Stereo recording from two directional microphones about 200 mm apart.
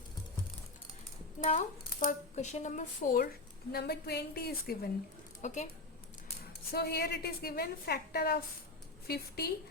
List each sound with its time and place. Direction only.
1.5 s a woman's voice: 40° left (ahead or behind)
5.4 s speech: 35° left (ahead or behind)
6.7 s a woman's voice: 50° left (ahead or behind)